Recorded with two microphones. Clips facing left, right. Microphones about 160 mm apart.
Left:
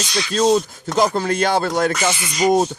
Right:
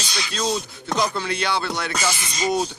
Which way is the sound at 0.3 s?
40° left (ahead or behind).